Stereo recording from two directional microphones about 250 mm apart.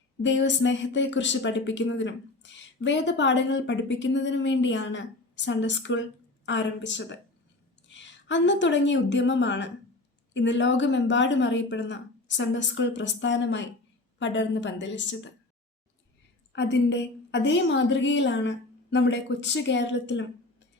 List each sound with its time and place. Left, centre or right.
0.2 s a woman's voice: left
16.5 s speech: left